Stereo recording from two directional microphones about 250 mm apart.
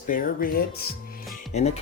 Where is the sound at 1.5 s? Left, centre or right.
Left.